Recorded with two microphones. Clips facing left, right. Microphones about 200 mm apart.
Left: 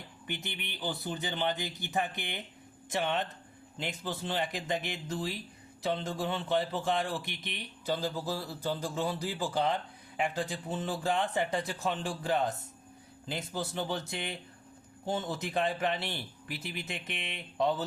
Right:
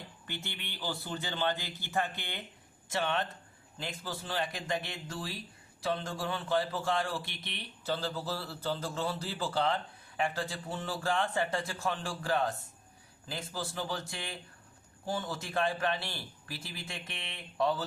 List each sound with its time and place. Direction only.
0.3 s a man's voice: 15° left (ahead or behind)